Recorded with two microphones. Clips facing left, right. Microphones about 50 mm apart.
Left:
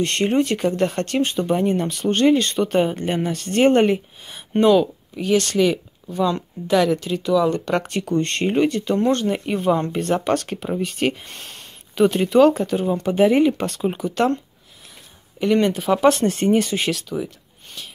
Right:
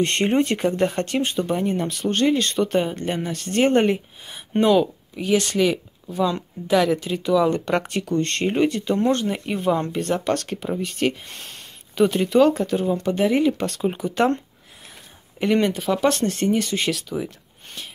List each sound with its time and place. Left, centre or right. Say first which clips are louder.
0.0 s speech: even; centre
1.4 s speech: left 3 dB; centre; by 7.7 s right
7.7 s speech: left 1 dB; centre
8.0 s speech: left 1 dB; centre
13.7 s speech: left 1 dB; centre
15.4 s speech: left 2 dB; centre
15.9 s speech: left 6 dB; centre
16.9 s speech: left 1 dB; centre